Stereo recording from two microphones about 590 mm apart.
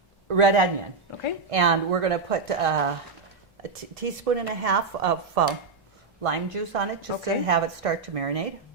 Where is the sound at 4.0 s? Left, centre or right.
Right.